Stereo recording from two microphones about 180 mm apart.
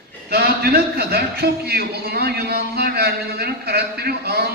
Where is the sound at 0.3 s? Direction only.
60° right (ahead or behind).